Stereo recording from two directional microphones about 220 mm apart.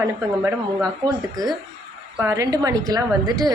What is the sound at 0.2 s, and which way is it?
A woman's voice, 15° right (ahead or behind).